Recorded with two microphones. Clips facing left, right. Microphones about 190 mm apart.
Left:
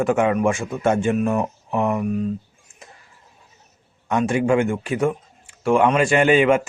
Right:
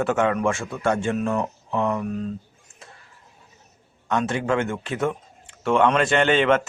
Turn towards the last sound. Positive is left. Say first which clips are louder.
# left 3 dB
turn(degrees=10)  # may be behind; listen again after turning